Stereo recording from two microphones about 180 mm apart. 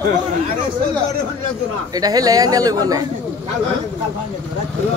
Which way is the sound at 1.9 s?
20° right (ahead or behind).